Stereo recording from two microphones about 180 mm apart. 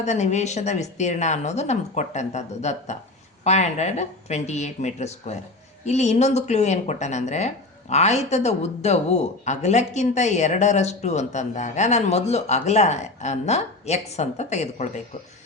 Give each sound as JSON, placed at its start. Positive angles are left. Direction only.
{"t": 0.0, "sound": "speech", "side_deg": 40}